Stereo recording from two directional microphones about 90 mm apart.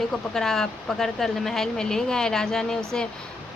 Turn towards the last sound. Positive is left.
turn(degrees=5)  # may be behind; listen again after turning